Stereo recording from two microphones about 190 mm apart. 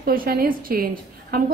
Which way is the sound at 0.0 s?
50° right (ahead or behind).